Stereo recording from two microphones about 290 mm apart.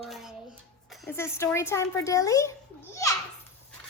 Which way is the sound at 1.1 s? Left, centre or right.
Centre.